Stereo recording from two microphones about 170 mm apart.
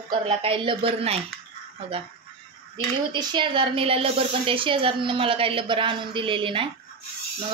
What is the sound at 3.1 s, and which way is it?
A woman's voice, 30° right (ahead or behind).